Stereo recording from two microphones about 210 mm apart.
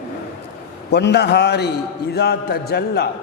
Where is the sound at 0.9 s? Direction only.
55° left (ahead or behind).